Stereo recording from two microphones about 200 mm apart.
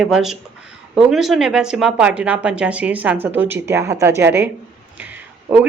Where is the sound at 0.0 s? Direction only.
Centre (ahead or behind).